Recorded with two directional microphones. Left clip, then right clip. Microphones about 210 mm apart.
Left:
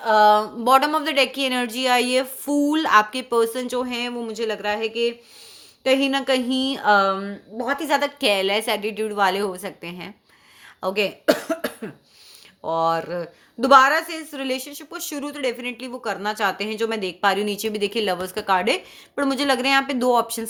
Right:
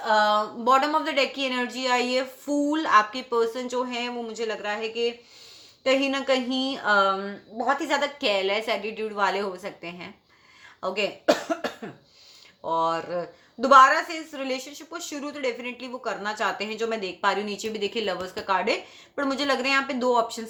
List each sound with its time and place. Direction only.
0.0 s a woman's voice: 50° left (ahead or behind)